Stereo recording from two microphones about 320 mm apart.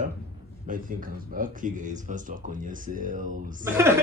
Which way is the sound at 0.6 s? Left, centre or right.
Right.